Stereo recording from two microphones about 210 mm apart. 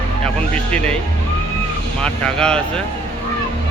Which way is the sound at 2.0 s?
5° left (ahead or behind).